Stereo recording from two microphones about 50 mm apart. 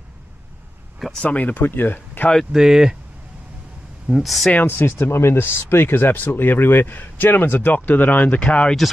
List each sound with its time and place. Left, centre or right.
1.2 s speech: left
2.5 s speech: centre
4.1 s speech: centre
4.6 s speech: left